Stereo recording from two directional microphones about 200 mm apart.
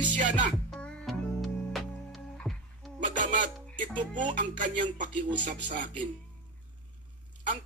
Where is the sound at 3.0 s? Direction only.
40° right (ahead or behind).